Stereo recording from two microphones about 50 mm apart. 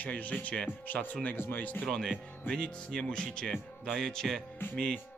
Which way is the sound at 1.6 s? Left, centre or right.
Left.